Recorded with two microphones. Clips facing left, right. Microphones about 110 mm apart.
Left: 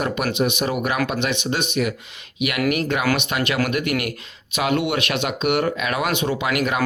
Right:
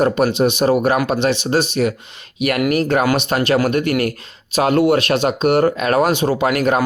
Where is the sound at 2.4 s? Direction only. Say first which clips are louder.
Right 5 dB; 45° right (ahead or behind).